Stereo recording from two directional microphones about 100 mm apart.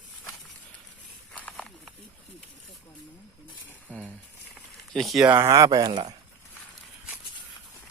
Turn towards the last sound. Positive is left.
turn(degrees=-45)  # may be behind; listen again after turning